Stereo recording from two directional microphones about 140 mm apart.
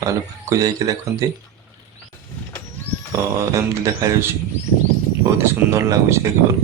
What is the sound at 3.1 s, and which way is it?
Speech, 25° right (ahead or behind).